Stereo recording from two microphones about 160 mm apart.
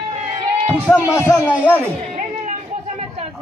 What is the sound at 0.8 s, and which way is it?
Speech, 10° left (ahead or behind).